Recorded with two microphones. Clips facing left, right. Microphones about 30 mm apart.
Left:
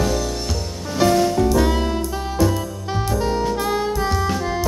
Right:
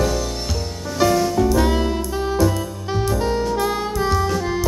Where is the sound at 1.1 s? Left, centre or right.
Centre.